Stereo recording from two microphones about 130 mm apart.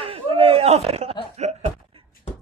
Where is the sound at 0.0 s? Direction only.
45° right (ahead or behind).